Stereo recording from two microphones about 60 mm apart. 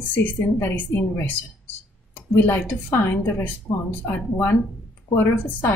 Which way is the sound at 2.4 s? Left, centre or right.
Left.